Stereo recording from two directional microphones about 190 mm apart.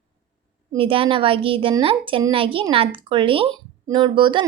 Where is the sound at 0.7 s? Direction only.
30° right (ahead or behind).